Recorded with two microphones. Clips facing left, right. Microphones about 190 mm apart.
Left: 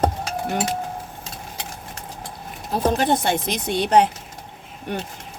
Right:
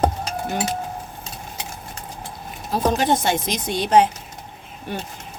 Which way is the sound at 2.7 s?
50° left (ahead or behind).